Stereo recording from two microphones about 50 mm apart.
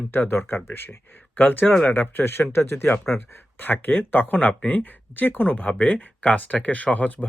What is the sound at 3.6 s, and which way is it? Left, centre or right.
Speech, left.